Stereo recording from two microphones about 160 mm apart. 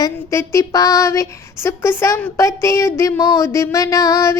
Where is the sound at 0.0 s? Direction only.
20° left (ahead or behind).